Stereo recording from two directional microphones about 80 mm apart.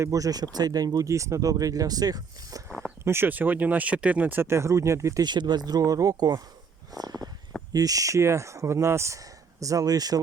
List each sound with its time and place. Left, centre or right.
0.0 s speech: right
3.0 s speech: right
5.2 s speech: right
6.9 s a sound: right
7.7 s speech: right